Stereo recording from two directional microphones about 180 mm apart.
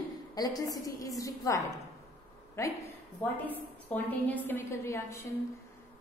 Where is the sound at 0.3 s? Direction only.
20° left (ahead or behind).